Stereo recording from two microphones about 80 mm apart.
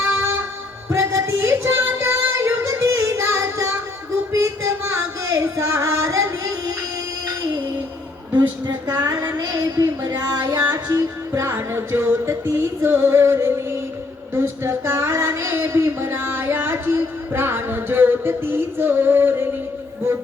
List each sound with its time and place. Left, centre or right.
0.9 s music: right
5.3 s singing: right
8.3 s a sound: right
8.9 s child singing: right
9.4 s speech: right
14.3 s a sound: right